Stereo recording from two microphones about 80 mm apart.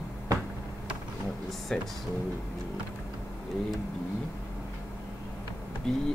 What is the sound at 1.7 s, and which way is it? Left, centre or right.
Speech, centre.